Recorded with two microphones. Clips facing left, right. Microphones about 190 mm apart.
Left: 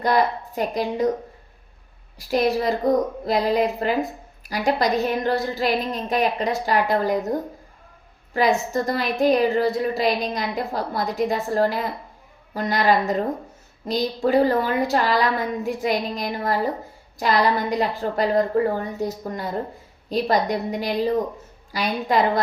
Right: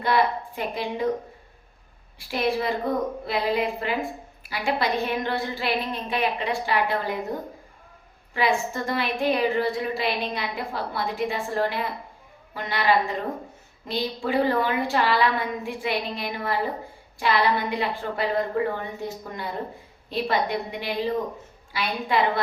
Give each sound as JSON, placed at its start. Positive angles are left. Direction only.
{"t": 0.0, "sound": "a woman's voice", "side_deg": 40}
{"t": 2.1, "sound": "a woman's voice", "side_deg": 40}
{"t": 8.3, "sound": "a woman's voice", "side_deg": 40}